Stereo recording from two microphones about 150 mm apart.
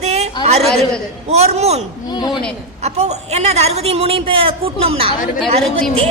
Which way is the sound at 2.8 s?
45° right (ahead or behind).